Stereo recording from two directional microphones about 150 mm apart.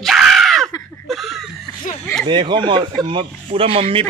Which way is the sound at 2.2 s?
30° right (ahead or behind).